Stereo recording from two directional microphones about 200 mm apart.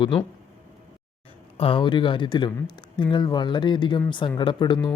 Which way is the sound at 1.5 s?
25° left (ahead or behind).